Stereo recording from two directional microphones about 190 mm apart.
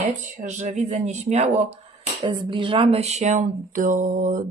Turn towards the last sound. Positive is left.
turn(degrees=-45)  # may be behind; listen again after turning